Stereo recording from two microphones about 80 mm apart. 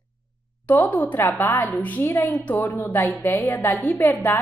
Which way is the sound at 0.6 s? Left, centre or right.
Left.